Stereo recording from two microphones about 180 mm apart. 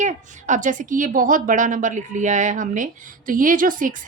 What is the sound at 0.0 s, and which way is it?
A woman's voice, 45° right (ahead or behind).